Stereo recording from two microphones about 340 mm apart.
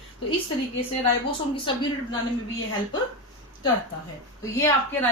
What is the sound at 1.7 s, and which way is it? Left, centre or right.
Speech, centre.